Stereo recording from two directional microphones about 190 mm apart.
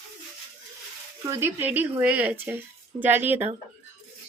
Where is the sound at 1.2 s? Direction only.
15° right (ahead or behind).